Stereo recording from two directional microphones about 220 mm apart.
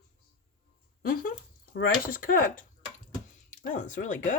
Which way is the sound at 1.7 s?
40° left (ahead or behind).